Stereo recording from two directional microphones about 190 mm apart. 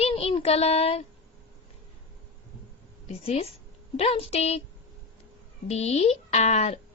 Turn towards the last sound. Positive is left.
turn(degrees=35)  # may be behind; listen again after turning